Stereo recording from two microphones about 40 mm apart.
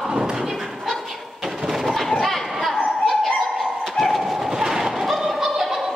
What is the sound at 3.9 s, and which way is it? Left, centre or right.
Bird, centre.